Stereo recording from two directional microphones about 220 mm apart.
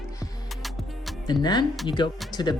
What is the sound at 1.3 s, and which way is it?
Speech, 20° left (ahead or behind).